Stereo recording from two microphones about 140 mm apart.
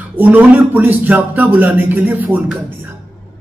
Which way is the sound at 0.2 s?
10° right (ahead or behind).